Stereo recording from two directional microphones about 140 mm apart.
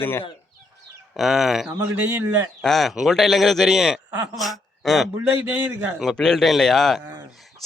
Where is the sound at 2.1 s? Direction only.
15° right (ahead or behind).